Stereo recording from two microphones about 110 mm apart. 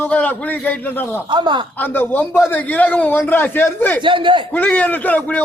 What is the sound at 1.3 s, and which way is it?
Speech, 45° right (ahead or behind).